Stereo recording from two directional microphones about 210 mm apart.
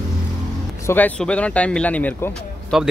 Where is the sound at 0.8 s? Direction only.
10° left (ahead or behind).